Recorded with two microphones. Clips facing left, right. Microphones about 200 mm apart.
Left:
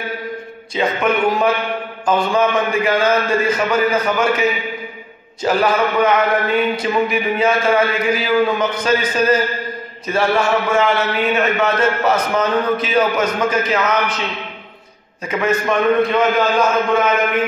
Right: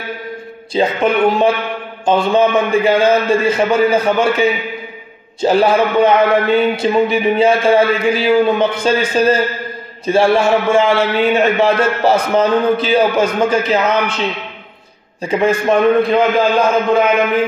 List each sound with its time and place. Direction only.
0.7 s a man's voice: 30° right (ahead or behind)
15.2 s a man's voice: 30° right (ahead or behind)